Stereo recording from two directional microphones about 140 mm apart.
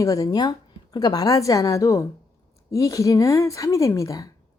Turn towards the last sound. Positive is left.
turn(degrees=25)  # may be behind; listen again after turning